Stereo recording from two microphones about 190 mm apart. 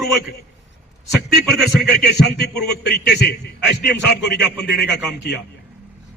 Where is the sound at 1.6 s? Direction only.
60° left (ahead or behind).